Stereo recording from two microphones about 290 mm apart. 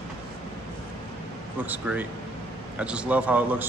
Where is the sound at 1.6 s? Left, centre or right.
Centre.